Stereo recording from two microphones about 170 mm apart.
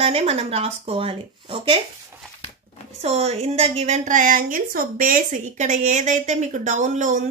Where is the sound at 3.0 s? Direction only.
40° right (ahead or behind).